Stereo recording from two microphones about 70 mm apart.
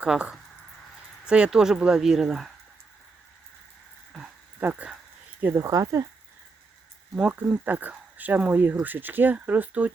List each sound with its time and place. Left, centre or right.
0.0 s speech: centre
4.1 s dog: centre
4.6 s speech: right
5.5 s speech: right
7.2 s speech: right